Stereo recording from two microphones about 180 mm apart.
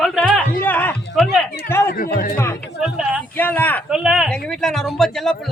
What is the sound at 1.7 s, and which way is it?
Music, 15° left (ahead or behind).